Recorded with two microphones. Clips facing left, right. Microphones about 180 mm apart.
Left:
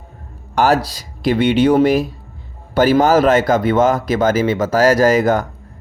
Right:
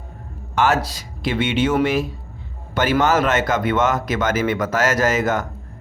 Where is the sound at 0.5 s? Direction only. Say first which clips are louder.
Left 4 dB; 35° left (ahead or behind).